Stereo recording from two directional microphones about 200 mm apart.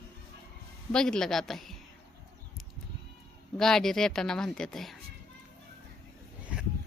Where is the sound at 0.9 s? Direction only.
5° left (ahead or behind).